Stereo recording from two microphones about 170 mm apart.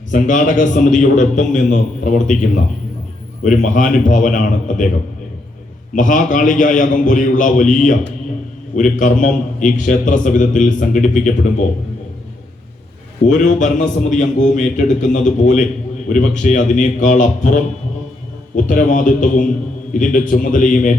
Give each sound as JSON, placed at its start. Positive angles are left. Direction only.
{"t": 0.1, "sound": "a man's voice", "side_deg": 50}
{"t": 5.9, "sound": "a man's voice", "side_deg": 50}
{"t": 13.2, "sound": "a man's voice", "side_deg": 50}